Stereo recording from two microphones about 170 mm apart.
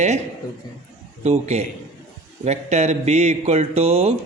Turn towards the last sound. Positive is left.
turn(degrees=-35)  # may be behind; listen again after turning